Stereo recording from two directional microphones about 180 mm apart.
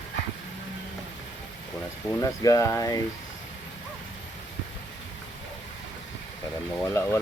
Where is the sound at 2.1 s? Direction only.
15° left (ahead or behind).